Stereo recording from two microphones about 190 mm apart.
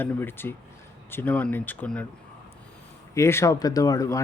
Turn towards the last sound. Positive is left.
turn(degrees=15)  # may be behind; listen again after turning